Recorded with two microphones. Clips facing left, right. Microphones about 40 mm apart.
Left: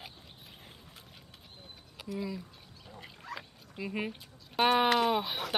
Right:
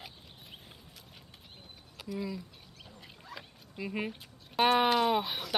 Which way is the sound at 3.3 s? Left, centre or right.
Left.